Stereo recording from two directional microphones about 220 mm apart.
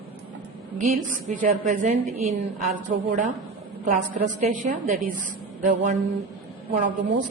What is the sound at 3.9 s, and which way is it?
A woman's voice, 35° right (ahead or behind).